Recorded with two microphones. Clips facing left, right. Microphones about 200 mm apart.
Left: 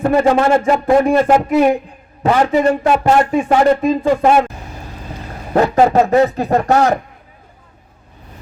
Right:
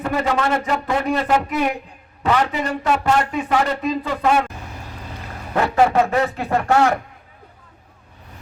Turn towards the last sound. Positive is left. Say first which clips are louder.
# left 4 dB
turn(degrees=40)  # may be behind; listen again after turning